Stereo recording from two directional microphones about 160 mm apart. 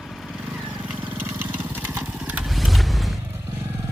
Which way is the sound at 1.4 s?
10° right (ahead or behind).